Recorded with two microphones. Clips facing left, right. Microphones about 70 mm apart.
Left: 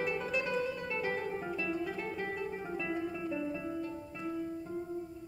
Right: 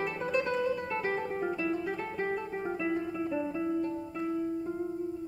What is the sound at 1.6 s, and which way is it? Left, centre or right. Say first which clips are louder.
Music: right 4 dB; right.